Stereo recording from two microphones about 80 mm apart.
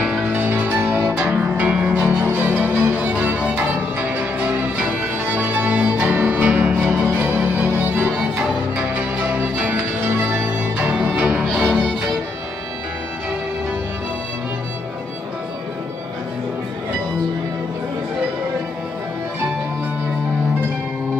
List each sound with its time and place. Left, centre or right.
0.3 s music: right
2.0 s music: right
2.3 s music: centre
8.4 s music: centre